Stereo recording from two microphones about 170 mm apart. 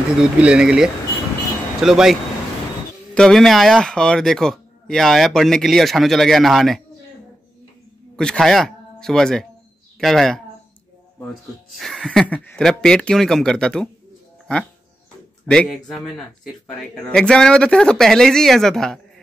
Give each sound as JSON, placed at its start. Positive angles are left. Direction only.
{"t": 0.2, "sound": "speech", "side_deg": -5}
{"t": 3.2, "sound": "speech", "side_deg": 0}
{"t": 8.2, "sound": "speech", "side_deg": 5}
{"t": 11.7, "sound": "speech", "side_deg": 0}
{"t": 15.4, "sound": "speech", "side_deg": 5}